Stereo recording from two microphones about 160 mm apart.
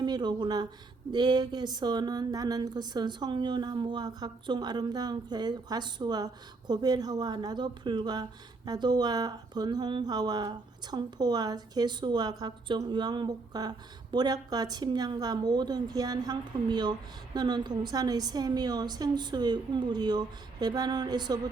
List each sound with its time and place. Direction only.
0.0 s speech: 25° right (ahead or behind)